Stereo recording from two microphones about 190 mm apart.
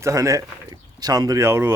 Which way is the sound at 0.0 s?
15° right (ahead or behind).